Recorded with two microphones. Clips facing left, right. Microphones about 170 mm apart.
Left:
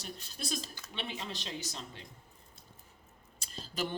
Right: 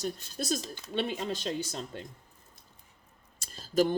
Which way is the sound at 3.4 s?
45° right (ahead or behind).